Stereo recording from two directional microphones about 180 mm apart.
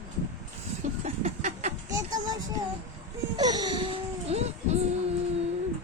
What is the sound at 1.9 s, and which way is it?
Music, 20° right (ahead or behind).